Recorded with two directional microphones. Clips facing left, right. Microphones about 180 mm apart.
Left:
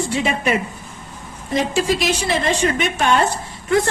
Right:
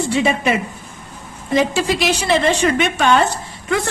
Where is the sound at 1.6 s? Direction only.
75° right (ahead or behind); by 3.2 s 90° right.